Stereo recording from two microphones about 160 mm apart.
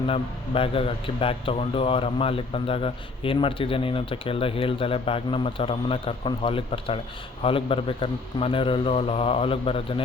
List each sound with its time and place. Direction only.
0.1 s a man's voice: 35° left (ahead or behind)